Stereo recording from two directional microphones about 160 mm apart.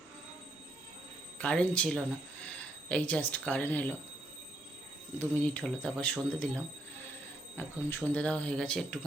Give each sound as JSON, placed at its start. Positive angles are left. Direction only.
{"t": 1.4, "sound": "speech", "side_deg": 5}
{"t": 5.2, "sound": "speech", "side_deg": 10}